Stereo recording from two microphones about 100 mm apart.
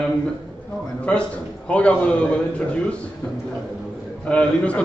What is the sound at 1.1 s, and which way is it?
A man's voice, 10° left (ahead or behind).